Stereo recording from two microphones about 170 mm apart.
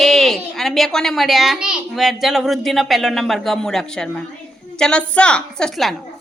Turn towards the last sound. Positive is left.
turn(degrees=0)  # may be behind; listen again after turning